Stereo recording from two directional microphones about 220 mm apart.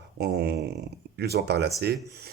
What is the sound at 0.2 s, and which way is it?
Speech, 45° right (ahead or behind).